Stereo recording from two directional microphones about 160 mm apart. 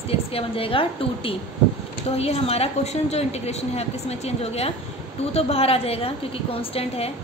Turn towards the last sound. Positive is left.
turn(degrees=40)  # may be behind; listen again after turning